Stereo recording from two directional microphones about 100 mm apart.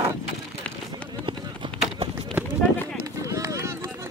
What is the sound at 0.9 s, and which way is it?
Run, 55° right (ahead or behind).